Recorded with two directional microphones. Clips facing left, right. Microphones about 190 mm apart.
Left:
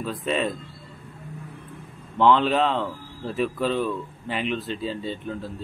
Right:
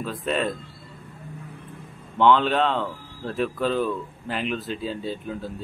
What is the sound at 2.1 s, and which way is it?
Speech, centre (ahead or behind).